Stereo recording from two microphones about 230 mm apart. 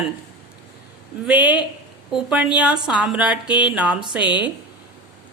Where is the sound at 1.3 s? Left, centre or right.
Centre.